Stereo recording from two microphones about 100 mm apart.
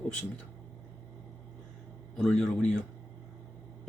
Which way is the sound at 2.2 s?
5° left (ahead or behind).